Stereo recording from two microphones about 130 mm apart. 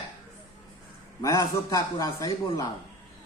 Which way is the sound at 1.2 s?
25° left (ahead or behind).